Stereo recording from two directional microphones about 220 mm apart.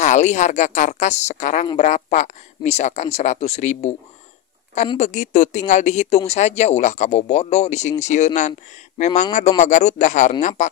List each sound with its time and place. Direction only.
0.0 s speech: 30° left (ahead or behind)
4.9 s speech: 35° left (ahead or behind)